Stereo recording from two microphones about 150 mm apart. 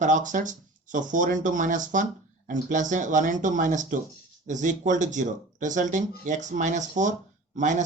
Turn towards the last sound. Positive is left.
turn(degrees=-55)  # may be behind; listen again after turning